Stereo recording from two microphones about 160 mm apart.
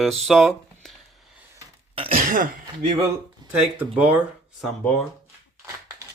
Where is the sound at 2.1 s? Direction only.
60° right (ahead or behind).